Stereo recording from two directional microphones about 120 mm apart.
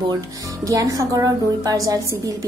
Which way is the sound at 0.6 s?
30° right (ahead or behind).